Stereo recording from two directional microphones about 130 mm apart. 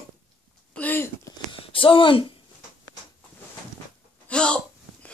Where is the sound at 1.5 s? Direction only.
40° left (ahead or behind).